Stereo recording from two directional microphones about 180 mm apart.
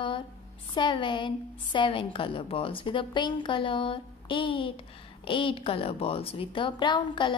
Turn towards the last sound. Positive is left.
turn(degrees=25)  # may be behind; listen again after turning